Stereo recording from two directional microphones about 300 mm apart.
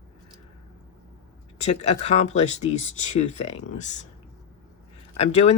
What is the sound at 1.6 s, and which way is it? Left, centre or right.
Speech, left.